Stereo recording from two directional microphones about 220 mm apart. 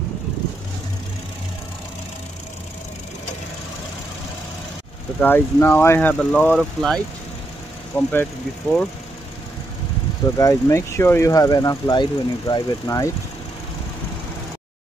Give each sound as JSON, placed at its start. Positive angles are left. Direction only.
{"t": 5.2, "sound": "speech", "side_deg": 10}
{"t": 10.3, "sound": "speech", "side_deg": 15}